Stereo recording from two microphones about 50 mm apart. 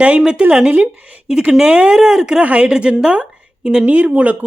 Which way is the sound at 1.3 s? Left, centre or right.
Centre.